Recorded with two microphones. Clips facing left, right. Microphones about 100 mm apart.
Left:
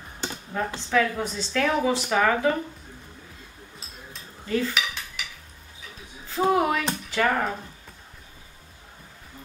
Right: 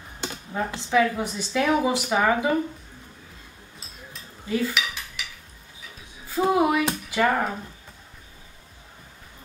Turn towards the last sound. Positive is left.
turn(degrees=-10)  # may be behind; listen again after turning